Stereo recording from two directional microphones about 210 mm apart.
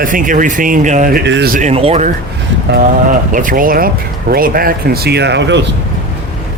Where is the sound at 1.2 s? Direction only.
55° right (ahead or behind).